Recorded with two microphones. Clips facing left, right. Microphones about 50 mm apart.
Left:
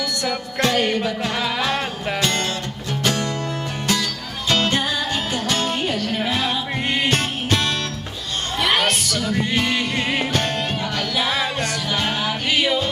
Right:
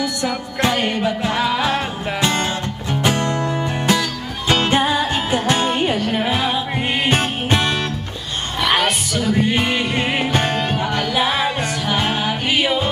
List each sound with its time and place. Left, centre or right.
0.0 s music: centre
8.5 s music: centre